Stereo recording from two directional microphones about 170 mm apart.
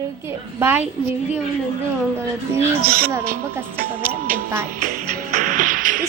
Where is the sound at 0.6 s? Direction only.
10° right (ahead or behind).